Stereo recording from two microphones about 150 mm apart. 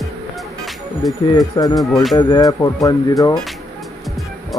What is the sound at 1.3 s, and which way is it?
Speech, 25° left (ahead or behind).